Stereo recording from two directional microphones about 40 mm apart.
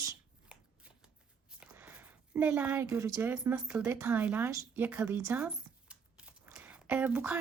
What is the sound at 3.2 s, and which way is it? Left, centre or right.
Speech, right.